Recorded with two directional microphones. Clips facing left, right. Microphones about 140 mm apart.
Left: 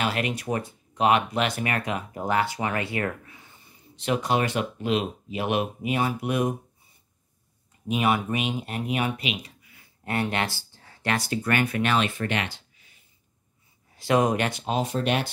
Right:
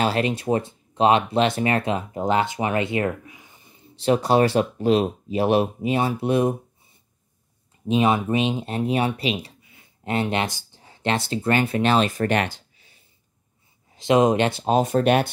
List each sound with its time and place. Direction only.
0.0 s speech: 30° right (ahead or behind)
3.9 s speech: 35° right (ahead or behind)
7.8 s speech: 25° right (ahead or behind); by 12.6 s 45° right (ahead or behind)
12.7 s a sound: 30° right (ahead or behind)
13.9 s speech: 20° right (ahead or behind)
14.6 s speech: 45° right (ahead or behind)